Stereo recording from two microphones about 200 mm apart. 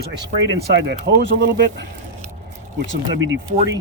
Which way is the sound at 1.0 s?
60° right (ahead or behind).